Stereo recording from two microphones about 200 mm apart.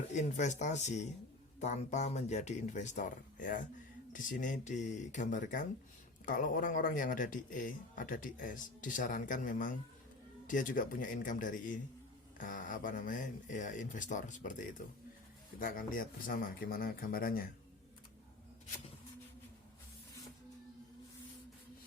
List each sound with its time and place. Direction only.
0.1 s speech: 35° left (ahead or behind)